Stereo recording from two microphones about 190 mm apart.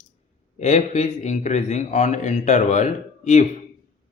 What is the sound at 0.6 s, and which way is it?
A man's voice, 35° left (ahead or behind).